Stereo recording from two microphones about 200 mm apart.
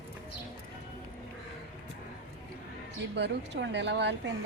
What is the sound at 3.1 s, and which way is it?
Speech, 60° right (ahead or behind).